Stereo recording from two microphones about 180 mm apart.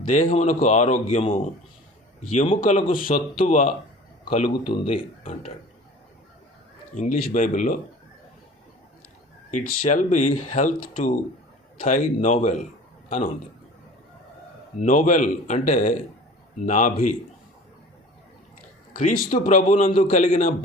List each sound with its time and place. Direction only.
0.1 s speech: 45° left (ahead or behind)
2.5 s speech: 35° left (ahead or behind)
6.9 s speech: 45° left (ahead or behind)
9.5 s a man's voice: 45° left (ahead or behind)
14.8 s speech: 45° left (ahead or behind)
18.9 s speech: 50° left (ahead or behind)